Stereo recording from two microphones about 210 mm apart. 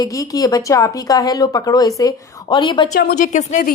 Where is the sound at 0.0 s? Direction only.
15° left (ahead or behind).